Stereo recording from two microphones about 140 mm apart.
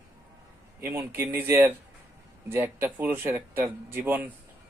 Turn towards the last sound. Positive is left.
turn(degrees=-15)  # may be behind; listen again after turning